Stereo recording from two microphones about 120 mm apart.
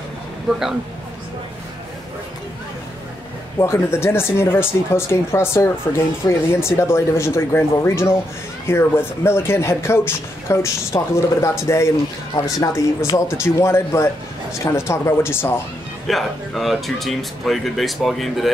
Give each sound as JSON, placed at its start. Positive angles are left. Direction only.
{"t": 0.5, "sound": "speech", "side_deg": -5}
{"t": 3.5, "sound": "speech", "side_deg": 20}
{"t": 16.1, "sound": "speech", "side_deg": 0}